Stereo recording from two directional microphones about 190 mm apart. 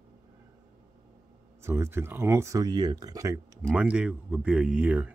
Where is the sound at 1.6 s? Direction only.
15° right (ahead or behind).